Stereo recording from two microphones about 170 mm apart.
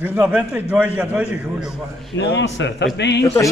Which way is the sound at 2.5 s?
90° left.